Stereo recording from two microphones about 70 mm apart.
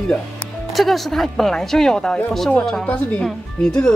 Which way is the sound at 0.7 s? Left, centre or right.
Centre.